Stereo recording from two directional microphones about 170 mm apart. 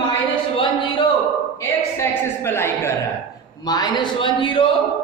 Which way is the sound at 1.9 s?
15° left (ahead or behind).